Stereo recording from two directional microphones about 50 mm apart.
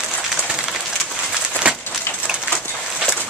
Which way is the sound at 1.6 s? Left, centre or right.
Right.